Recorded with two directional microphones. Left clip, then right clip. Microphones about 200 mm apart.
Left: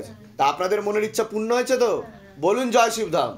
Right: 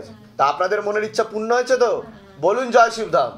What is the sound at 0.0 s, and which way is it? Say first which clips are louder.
A man's voice: right 2 dB; 45° left (ahead or behind).